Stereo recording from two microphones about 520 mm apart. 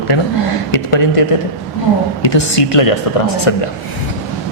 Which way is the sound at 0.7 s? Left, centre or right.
Left.